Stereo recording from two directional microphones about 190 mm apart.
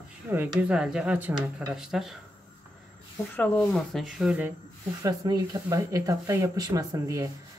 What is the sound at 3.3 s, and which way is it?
Speech, 10° left (ahead or behind).